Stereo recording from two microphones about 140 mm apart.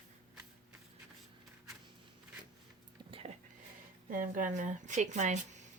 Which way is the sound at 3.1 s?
40° right (ahead or behind).